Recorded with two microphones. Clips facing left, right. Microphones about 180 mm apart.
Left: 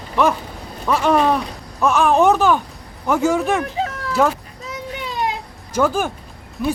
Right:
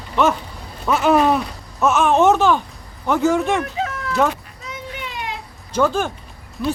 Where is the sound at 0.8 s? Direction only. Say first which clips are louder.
Right 1 dB; centre (ahead or behind).